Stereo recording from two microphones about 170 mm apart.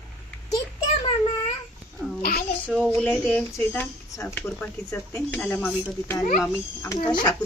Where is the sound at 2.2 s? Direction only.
60° left (ahead or behind).